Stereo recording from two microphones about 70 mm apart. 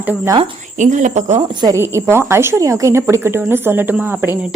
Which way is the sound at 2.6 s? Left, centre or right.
Right.